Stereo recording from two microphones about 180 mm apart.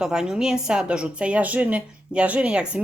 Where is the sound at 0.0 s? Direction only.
5° right (ahead or behind).